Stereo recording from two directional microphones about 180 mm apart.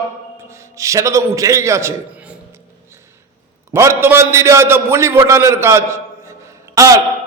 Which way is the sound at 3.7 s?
15° right (ahead or behind).